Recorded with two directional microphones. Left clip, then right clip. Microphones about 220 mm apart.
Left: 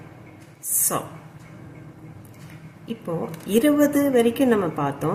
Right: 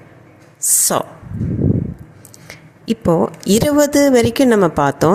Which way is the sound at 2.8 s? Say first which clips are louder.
Right 14 dB; 40° right (ahead or behind).